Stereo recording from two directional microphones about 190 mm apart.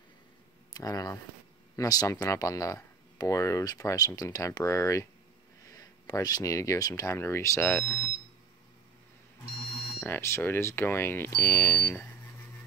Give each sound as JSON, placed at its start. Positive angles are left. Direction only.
{"t": 0.7, "sound": "speech", "side_deg": 20}
{"t": 9.9, "sound": "speech", "side_deg": 10}